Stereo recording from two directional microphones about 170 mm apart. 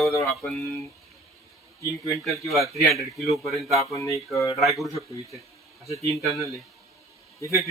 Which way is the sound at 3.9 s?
20° left (ahead or behind).